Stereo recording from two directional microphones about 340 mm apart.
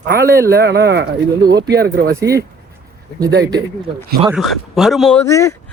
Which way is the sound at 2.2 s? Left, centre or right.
Centre.